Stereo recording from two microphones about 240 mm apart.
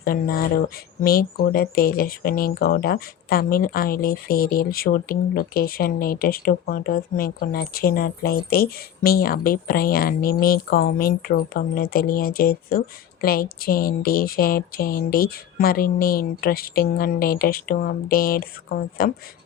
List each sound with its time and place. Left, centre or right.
0.0 s speech: left